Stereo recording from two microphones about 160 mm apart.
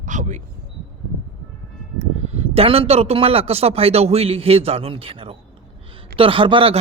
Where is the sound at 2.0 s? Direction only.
40° right (ahead or behind).